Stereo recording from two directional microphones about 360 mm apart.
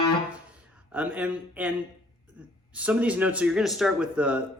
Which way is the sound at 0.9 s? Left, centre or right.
Centre.